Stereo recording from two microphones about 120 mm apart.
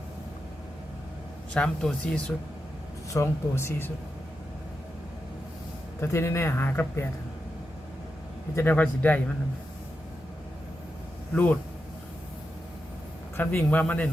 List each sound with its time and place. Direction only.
1.5 s a man's voice: 5° left (ahead or behind)
3.1 s a man's voice: 25° left (ahead or behind)
6.0 s a man's voice: 25° left (ahead or behind)
8.5 s a man's voice: 15° left (ahead or behind)
13.3 s a man's voice: 15° left (ahead or behind)